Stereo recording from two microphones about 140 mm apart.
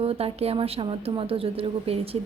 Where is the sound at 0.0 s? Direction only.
45° right (ahead or behind).